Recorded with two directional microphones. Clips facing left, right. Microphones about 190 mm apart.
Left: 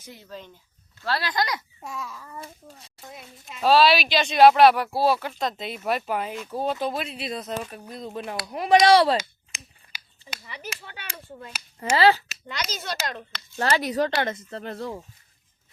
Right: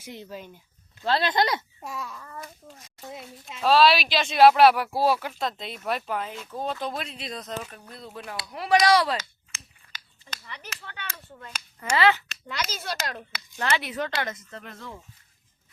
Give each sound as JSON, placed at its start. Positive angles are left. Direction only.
{"t": 0.0, "sound": "speech", "side_deg": -15}
{"t": 1.0, "sound": "speech", "side_deg": -20}
{"t": 1.8, "sound": "speech", "side_deg": 0}
{"t": 2.4, "sound": "speech", "side_deg": 30}
{"t": 3.6, "sound": "speech", "side_deg": 0}
{"t": 9.5, "sound": "a sound", "side_deg": 15}
{"t": 10.2, "sound": "speech", "side_deg": 10}
{"t": 11.8, "sound": "speech", "side_deg": 30}
{"t": 12.3, "sound": "speech", "side_deg": 0}
{"t": 13.6, "sound": "speech", "side_deg": 40}